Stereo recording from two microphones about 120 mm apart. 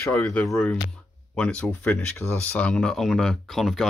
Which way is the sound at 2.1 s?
20° left (ahead or behind).